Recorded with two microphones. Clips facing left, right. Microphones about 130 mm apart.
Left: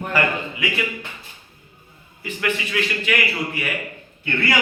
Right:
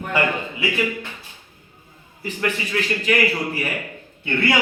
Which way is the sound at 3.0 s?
40° right (ahead or behind).